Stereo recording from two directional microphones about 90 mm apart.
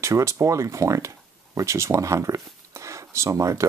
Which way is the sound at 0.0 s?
35° right (ahead or behind).